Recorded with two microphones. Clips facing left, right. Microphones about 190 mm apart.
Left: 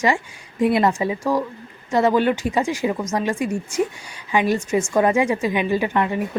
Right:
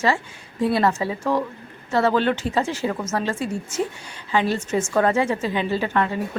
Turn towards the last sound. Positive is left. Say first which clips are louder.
# left 2 dB
turn(degrees=15)  # may be behind; listen again after turning